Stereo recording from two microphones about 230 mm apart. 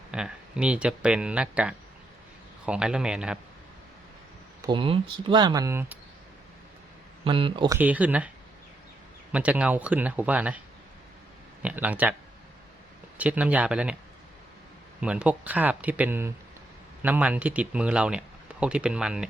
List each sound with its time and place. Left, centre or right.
0.1 s speech: centre
4.6 s speech: right
7.3 s speech: right
7.8 s speech: centre
9.3 s speech: centre
11.6 s speech: centre
13.1 s speech: centre
15.0 s speech: centre